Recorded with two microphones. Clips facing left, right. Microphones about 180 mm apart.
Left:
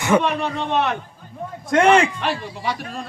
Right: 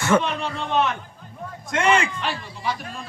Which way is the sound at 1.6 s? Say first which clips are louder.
Left 6 dB; 55° left (ahead or behind).